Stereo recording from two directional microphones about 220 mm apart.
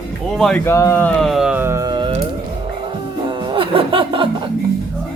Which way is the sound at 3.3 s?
20° right (ahead or behind).